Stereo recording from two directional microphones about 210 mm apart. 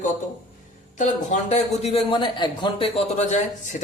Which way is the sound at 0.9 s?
35° left (ahead or behind).